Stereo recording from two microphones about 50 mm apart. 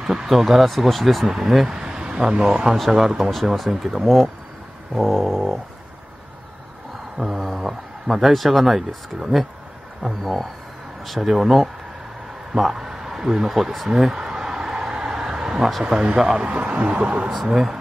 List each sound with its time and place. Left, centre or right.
0.0 s a man's voice: centre
7.2 s speech: centre
12.5 s a sound: centre
15.8 s a man's voice: centre
17.5 s a man's voice: centre